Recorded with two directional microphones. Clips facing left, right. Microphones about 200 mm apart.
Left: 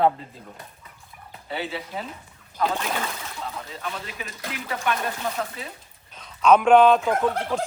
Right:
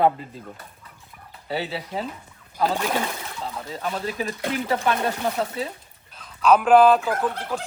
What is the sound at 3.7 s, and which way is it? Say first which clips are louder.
Speech: right 6 dB; 40° right (ahead or behind).